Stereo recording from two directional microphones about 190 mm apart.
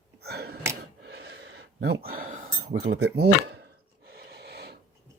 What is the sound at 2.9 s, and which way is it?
Speech, 65° right (ahead or behind).